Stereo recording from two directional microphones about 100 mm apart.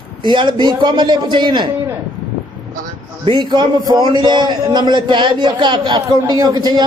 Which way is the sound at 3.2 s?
50° right (ahead or behind).